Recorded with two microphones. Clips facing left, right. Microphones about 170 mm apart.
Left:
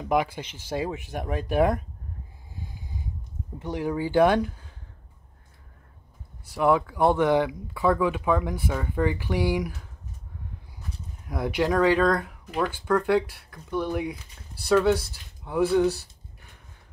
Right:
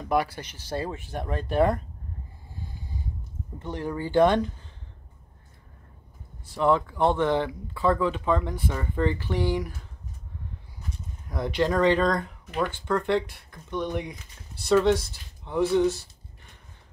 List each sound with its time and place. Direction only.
0.0 s speech: 15° left (ahead or behind)
3.5 s speech: 10° left (ahead or behind)
6.4 s speech: 10° left (ahead or behind)
11.2 s speech: 10° left (ahead or behind)